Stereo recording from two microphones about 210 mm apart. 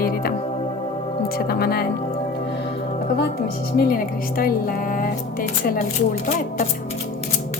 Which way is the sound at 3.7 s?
45° left (ahead or behind).